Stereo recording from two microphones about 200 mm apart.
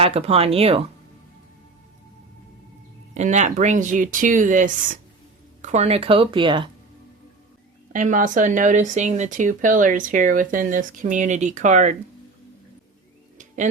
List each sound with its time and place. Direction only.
0.0 s speech: 30° right (ahead or behind)
3.2 s speech: 35° right (ahead or behind)
7.9 s speech: 40° right (ahead or behind)